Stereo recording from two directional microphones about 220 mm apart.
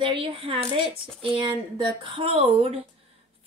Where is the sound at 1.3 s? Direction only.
20° right (ahead or behind).